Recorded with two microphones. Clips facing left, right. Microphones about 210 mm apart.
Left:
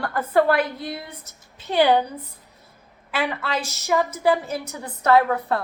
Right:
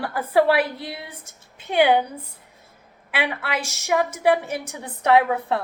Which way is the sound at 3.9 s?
10° right (ahead or behind).